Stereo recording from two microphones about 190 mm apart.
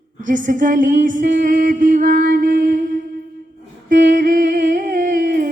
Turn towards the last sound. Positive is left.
turn(degrees=-45)  # may be behind; listen again after turning